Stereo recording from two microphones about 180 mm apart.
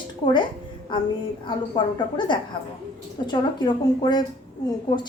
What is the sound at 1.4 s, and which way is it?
A woman's voice, 25° left (ahead or behind).